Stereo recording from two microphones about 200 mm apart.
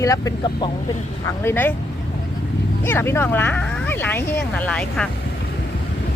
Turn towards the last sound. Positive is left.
turn(degrees=5)  # may be behind; listen again after turning